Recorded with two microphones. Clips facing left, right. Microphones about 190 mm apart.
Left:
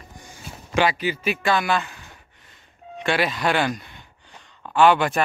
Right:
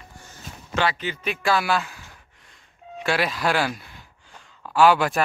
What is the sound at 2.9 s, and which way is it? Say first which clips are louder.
Speech: left 1 dB; centre (ahead or behind).